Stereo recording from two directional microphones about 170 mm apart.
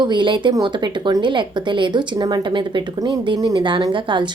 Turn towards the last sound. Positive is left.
turn(degrees=-30)  # may be behind; listen again after turning